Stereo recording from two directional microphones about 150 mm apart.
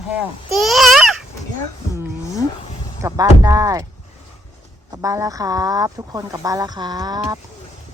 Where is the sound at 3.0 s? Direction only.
25° right (ahead or behind).